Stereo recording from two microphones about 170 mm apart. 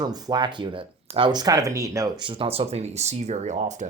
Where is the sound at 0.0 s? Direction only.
25° right (ahead or behind).